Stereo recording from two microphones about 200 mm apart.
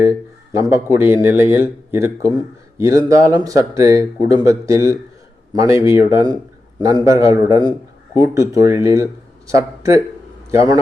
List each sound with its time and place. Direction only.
0.7 s speech: 10° right (ahead or behind)